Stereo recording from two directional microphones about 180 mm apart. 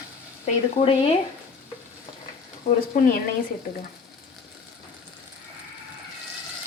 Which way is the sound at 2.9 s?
50° left (ahead or behind).